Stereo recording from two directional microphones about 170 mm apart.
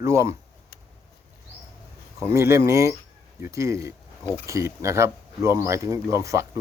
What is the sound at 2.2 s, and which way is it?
Speech, 15° right (ahead or behind).